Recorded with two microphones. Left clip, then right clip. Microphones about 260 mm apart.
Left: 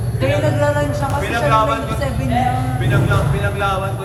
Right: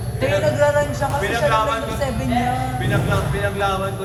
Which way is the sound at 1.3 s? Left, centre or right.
Right.